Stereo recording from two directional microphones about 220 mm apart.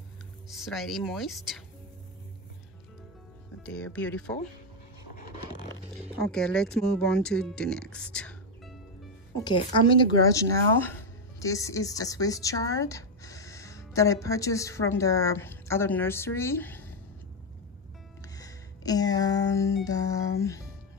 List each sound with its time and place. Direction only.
0.5 s speech: centre (ahead or behind)
3.6 s speech: 5° left (ahead or behind)
6.2 s speech: 5° left (ahead or behind)
9.3 s speech: 20° left (ahead or behind)
18.3 s music: 15° left (ahead or behind)